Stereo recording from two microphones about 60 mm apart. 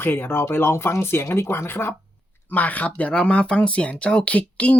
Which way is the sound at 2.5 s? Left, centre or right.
Left.